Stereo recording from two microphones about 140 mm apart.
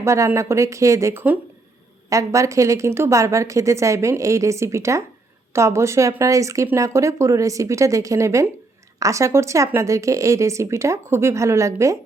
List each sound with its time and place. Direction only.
0.0 s speech: 20° right (ahead or behind)